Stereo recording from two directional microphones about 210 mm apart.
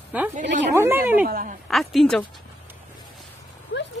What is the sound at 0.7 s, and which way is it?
Speech, 10° right (ahead or behind).